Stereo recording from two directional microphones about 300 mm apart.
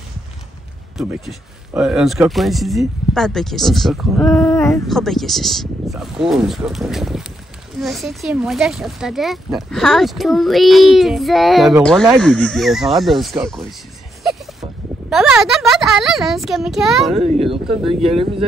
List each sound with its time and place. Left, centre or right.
0.9 s speech: centre
18.0 s speech: centre